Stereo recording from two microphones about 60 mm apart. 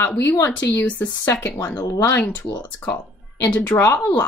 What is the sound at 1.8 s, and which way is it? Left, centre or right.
Speech, left.